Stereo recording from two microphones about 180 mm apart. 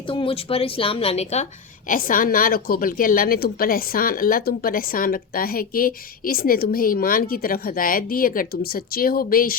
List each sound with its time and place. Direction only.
0.0 s speech: 30° left (ahead or behind)
1.9 s a woman's voice: 50° left (ahead or behind)